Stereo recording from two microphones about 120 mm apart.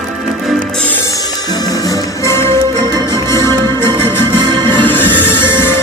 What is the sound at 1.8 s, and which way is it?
Music, 25° left (ahead or behind).